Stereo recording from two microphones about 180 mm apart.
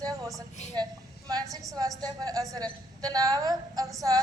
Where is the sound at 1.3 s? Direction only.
20° right (ahead or behind).